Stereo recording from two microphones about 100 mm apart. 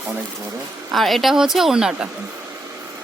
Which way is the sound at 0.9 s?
Centre (ahead or behind).